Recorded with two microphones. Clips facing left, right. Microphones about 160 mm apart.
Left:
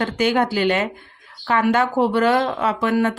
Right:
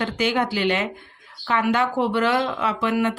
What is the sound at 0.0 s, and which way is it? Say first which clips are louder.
Speech: left 3 dB; 45° left (ahead or behind).